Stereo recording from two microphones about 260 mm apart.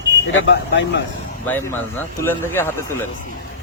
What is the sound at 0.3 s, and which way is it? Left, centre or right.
Speech, left.